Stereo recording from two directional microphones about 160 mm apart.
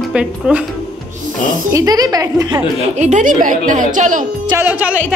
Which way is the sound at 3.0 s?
50° right (ahead or behind).